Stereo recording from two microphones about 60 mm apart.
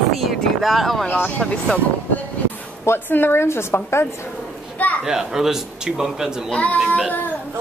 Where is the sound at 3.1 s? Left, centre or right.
Left.